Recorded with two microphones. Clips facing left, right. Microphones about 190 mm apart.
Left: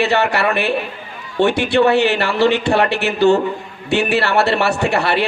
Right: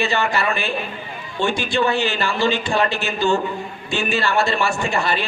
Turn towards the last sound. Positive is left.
turn(degrees=65)  # may be behind; listen again after turning